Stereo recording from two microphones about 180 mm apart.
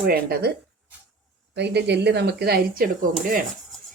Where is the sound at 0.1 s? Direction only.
60° right (ahead or behind).